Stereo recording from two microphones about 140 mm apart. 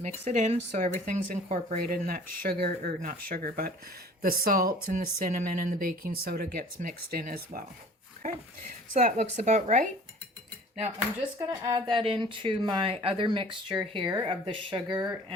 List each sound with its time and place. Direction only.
0.0 s speech: 55° right (ahead or behind); by 1.5 s 70° right (ahead or behind)
1.8 s speech: 90° right
8.2 s speech: 80° right
9.3 s speech: 55° right (ahead or behind)
11.3 s speech: 25° right (ahead or behind)
11.9 s speech: 35° right (ahead or behind)